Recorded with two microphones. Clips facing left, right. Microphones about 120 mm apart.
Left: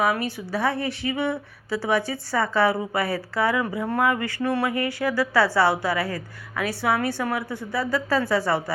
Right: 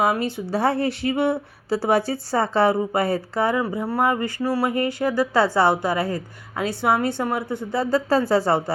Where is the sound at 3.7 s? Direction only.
10° right (ahead or behind).